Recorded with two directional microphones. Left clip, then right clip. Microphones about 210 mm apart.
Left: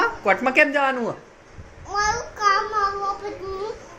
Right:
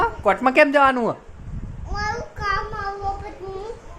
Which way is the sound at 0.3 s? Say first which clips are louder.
Right 2 dB; 30° right (ahead or behind).